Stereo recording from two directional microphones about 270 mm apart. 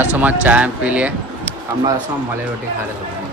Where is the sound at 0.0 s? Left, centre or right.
Centre.